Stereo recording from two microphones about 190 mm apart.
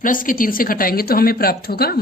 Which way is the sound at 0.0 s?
45° left (ahead or behind).